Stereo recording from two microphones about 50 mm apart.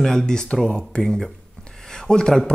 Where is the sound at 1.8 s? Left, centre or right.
Centre.